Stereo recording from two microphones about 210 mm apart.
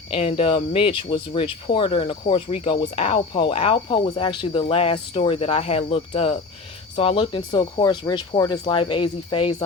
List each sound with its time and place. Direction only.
0.1 s speech: 30° left (ahead or behind)